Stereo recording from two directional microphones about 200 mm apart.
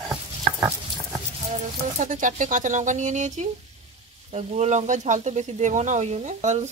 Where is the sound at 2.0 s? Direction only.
40° right (ahead or behind).